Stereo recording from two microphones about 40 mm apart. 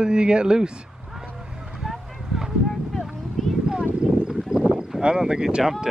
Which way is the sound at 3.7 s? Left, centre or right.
Centre.